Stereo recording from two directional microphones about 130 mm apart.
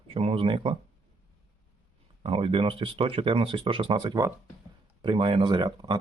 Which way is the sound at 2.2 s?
45° right (ahead or behind).